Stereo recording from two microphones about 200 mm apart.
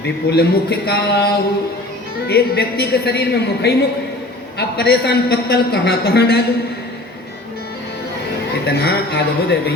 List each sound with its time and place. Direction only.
0.0 s a man's voice: 55° left (ahead or behind)
8.6 s a man's voice: 50° left (ahead or behind)